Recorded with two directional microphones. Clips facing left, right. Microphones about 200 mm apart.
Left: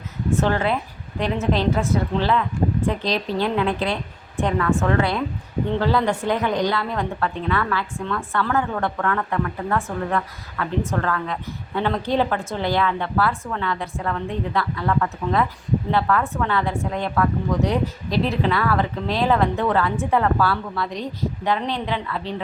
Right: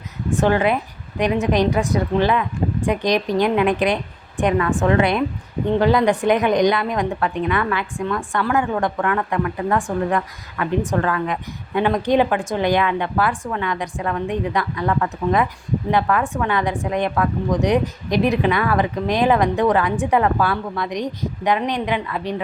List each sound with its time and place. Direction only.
0.3 s a woman's voice: 15° right (ahead or behind)